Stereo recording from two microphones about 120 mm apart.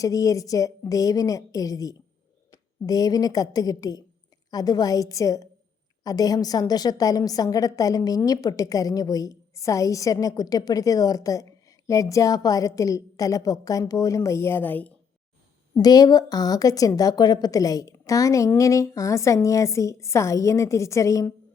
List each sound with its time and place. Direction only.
0.0 s a woman's voice: 30° left (ahead or behind)
15.7 s a woman's voice: 35° left (ahead or behind)